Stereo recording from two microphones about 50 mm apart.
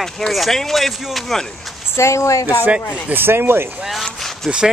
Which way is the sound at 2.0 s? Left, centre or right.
Left.